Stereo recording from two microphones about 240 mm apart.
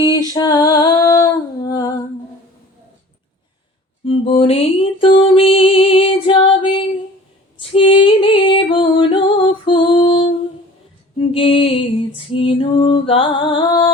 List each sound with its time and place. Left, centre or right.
0.0 s female singing: centre
4.0 s mantra: left
5.2 s music: left
11.3 s female singing: left